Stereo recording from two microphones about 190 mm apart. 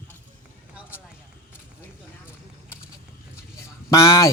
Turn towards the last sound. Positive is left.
turn(degrees=15)  # may be behind; listen again after turning